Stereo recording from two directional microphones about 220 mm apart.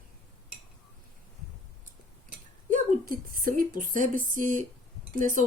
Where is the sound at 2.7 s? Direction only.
40° right (ahead or behind).